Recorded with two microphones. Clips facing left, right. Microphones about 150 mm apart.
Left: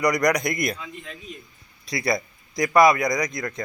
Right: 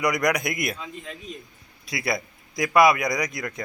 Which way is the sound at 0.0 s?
5° right (ahead or behind).